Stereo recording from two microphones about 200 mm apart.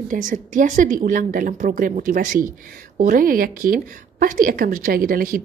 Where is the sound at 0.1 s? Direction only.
40° right (ahead or behind).